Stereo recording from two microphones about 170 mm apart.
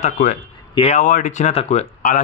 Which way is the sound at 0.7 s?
35° left (ahead or behind).